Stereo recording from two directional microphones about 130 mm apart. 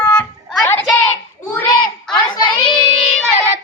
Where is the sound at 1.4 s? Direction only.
15° left (ahead or behind).